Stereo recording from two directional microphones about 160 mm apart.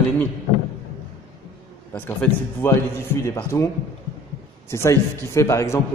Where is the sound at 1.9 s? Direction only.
10° left (ahead or behind).